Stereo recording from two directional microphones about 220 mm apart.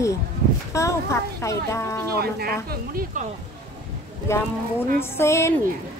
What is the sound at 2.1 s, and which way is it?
Speech, 45° right (ahead or behind).